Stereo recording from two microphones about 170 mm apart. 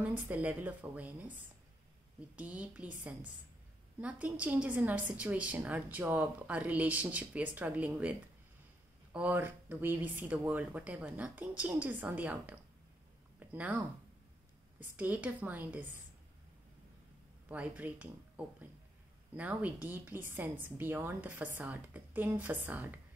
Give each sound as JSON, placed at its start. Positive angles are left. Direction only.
{"t": 0.3, "sound": "a woman's voice", "side_deg": -10}
{"t": 9.1, "sound": "a woman's voice", "side_deg": -10}
{"t": 17.5, "sound": "a woman's voice", "side_deg": -10}